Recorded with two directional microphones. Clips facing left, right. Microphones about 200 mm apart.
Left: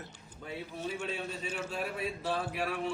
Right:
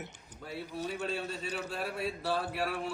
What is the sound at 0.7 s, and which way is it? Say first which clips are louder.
Speech: right 2 dB; 40° right (ahead or behind).